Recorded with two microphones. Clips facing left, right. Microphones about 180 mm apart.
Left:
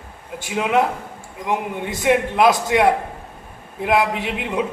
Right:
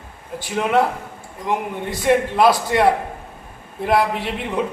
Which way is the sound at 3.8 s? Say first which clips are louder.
Even; 15° left (ahead or behind).